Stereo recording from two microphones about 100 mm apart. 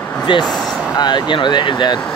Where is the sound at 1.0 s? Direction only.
50° left (ahead or behind).